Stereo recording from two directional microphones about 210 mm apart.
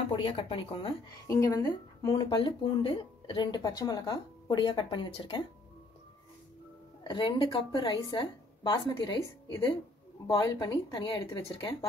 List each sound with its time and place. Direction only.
0.1 s speech: 25° left (ahead or behind)
1.2 s speech: 15° left (ahead or behind)
7.0 s speech: 20° left (ahead or behind)
10.2 s speech: 20° left (ahead or behind)